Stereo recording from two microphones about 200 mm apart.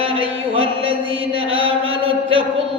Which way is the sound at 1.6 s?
25° right (ahead or behind).